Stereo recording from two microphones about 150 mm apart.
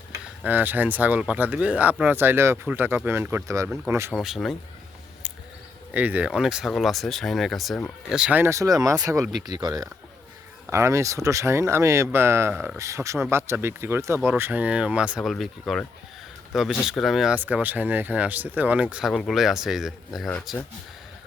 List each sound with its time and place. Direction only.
0.4 s speech: 10° right (ahead or behind)
4.1 s speech: centre (ahead or behind)
5.9 s speech: 10° right (ahead or behind)